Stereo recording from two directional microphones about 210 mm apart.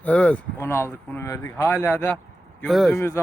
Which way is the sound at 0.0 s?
5° left (ahead or behind).